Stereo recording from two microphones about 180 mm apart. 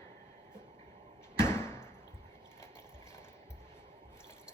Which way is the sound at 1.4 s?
15° left (ahead or behind).